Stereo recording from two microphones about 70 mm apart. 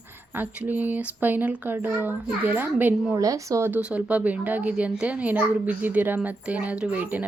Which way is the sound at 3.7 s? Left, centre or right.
Centre.